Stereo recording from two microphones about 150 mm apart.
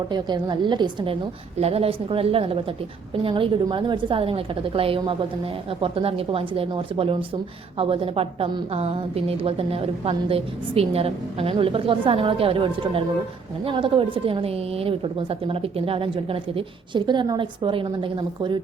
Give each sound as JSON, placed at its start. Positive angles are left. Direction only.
{"t": 0.1, "sound": "a woman's voice", "side_deg": -30}
{"t": 1.5, "sound": "a woman's voice", "side_deg": -40}